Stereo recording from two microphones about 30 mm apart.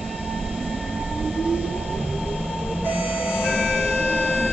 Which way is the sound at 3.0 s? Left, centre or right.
Right.